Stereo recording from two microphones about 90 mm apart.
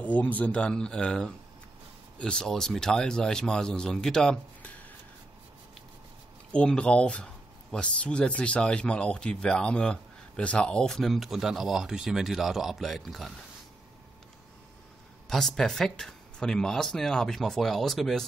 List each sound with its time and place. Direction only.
0.0 s speech: 15° left (ahead or behind)
6.5 s speech: 10° left (ahead or behind)
15.2 s speech: 5° left (ahead or behind)